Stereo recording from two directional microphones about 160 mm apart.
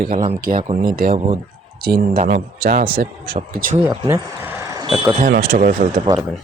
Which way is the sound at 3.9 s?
20° right (ahead or behind).